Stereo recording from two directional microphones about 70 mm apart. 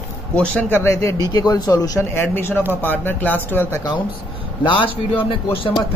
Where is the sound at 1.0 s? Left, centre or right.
Left.